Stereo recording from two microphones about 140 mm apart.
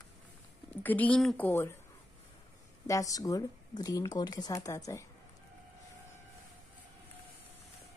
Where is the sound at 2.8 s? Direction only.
25° left (ahead or behind).